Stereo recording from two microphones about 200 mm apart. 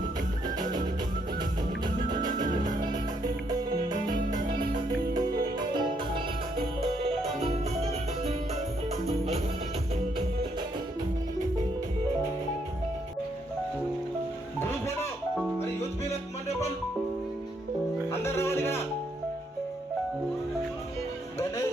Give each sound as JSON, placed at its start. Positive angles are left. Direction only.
{"t": 5.5, "sound": "music", "side_deg": -20}
{"t": 9.0, "sound": "music", "side_deg": -30}
{"t": 14.6, "sound": "music", "side_deg": 10}
{"t": 15.4, "sound": "music", "side_deg": -5}
{"t": 18.1, "sound": "music", "side_deg": 15}